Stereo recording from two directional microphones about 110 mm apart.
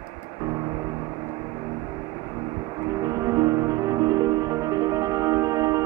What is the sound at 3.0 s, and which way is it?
Music, 30° right (ahead or behind).